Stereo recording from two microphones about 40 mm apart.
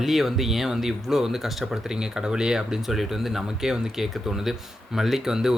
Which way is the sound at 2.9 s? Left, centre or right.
Centre.